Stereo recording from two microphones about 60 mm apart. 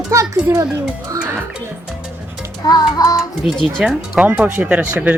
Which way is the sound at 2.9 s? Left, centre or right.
Left.